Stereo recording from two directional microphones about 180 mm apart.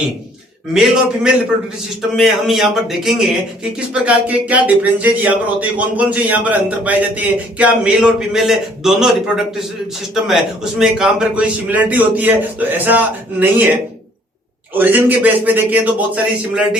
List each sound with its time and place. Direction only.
0.7 s a man's voice: 5° right (ahead or behind)
14.7 s speech: 10° right (ahead or behind)